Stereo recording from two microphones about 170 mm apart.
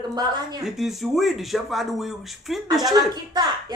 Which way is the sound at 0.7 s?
Centre (ahead or behind).